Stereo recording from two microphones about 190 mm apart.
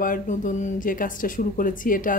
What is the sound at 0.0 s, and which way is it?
Speech, 45° left (ahead or behind).